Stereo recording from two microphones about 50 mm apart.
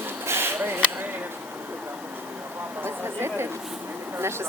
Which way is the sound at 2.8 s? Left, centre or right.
Right.